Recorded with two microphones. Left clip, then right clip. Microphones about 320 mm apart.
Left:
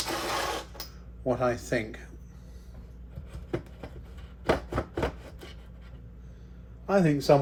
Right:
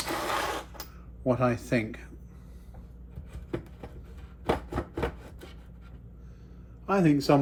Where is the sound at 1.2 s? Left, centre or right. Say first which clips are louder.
Right 1 dB; right.